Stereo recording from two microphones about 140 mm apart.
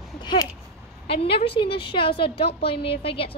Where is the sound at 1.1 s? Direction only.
40° left (ahead or behind).